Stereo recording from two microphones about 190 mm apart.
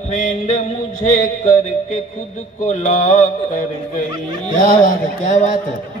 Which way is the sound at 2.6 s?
40° left (ahead or behind).